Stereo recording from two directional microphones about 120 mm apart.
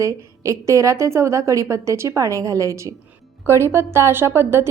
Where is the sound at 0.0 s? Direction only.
25° right (ahead or behind).